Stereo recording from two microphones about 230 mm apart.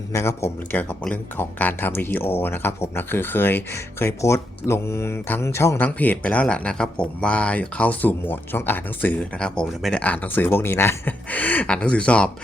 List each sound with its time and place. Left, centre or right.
0.1 s speech: centre